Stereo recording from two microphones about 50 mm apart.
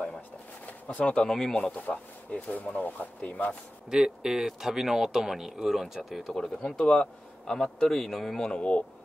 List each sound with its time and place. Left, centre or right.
0.7 s speech: left; by 1.7 s centre
1.8 s speech: left
3.9 s speech: centre
6.3 s a man's voice: centre
8.5 s speech: left